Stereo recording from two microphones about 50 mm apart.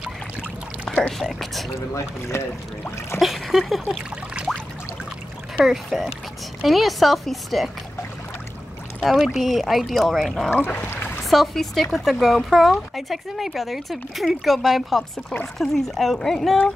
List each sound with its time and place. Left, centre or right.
1.1 s speech: centre
2.0 s speech: left
3.2 s speech: centre
4.5 s pour: centre
5.7 s speech: centre
9.0 s speech: centre
10.8 s a sound: left
11.2 s speech: centre